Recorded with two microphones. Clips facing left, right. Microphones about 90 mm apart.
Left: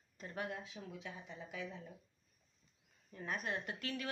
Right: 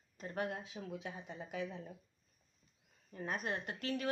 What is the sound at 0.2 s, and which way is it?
Speech, 45° right (ahead or behind).